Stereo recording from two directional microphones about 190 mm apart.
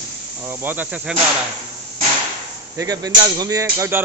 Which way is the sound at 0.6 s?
10° right (ahead or behind).